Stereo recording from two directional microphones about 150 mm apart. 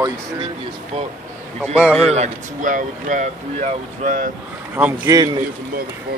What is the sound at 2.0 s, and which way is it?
Speech, 50° right (ahead or behind).